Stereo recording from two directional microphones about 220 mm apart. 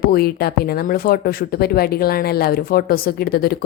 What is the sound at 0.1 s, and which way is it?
Speech, 45° left (ahead or behind).